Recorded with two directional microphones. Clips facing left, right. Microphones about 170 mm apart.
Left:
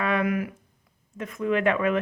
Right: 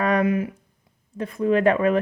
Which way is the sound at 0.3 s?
25° right (ahead or behind).